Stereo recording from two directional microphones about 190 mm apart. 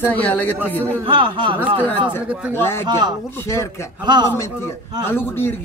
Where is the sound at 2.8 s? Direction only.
20° right (ahead or behind).